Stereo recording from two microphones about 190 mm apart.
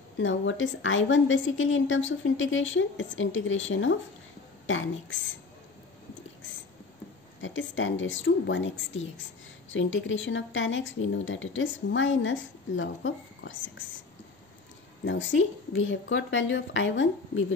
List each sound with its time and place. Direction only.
0.2 s a woman's voice: 90° left
7.4 s speech: 85° left
15.0 s speech: 80° left